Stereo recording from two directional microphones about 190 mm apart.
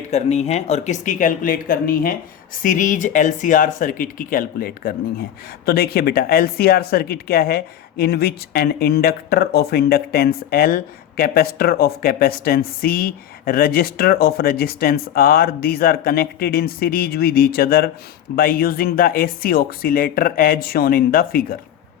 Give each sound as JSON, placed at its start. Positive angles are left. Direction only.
{"t": 0.1, "sound": "speech", "side_deg": 35}